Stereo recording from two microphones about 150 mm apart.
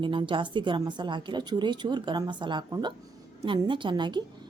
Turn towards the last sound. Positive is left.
turn(degrees=-30)  # may be behind; listen again after turning